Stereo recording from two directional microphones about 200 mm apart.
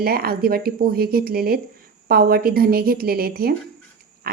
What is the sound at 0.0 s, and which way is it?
A woman's voice, 50° right (ahead or behind).